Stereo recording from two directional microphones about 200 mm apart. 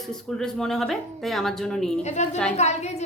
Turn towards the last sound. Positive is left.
turn(degrees=35)  # may be behind; listen again after turning